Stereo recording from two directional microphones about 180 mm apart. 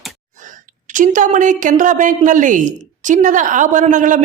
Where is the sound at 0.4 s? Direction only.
45° right (ahead or behind).